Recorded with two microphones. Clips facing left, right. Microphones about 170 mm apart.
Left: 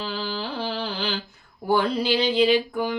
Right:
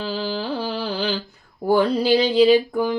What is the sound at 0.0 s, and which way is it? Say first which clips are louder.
Carnatic music: right 4 dB; 40° right (ahead or behind).